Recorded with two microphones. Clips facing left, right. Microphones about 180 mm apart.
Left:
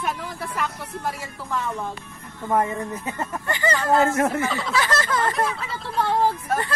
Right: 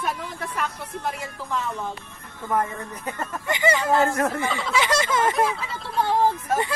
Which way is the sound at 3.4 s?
15° right (ahead or behind).